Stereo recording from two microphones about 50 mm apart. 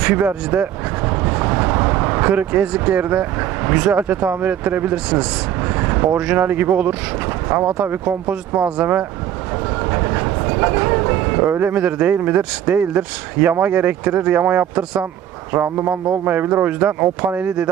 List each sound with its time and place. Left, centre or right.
0.1 s vehicle: right
3.1 s speech: right
5.6 s vehicle: right
6.1 s speech: right
6.4 s speech: right
8.3 s speech: right
9.8 s train: right
12.4 s speech: right
15.5 s speech: right
15.9 s speech: right
16.8 s speech: right